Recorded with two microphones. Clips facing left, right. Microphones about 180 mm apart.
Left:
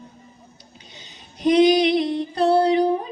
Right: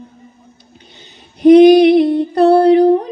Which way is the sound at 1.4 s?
55° right (ahead or behind).